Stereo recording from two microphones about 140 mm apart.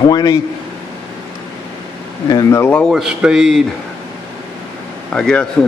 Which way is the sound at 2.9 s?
5° right (ahead or behind).